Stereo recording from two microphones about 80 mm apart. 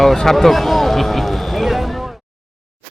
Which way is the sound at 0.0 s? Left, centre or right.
Centre.